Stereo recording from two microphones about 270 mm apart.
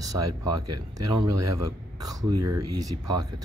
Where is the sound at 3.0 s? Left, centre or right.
Right.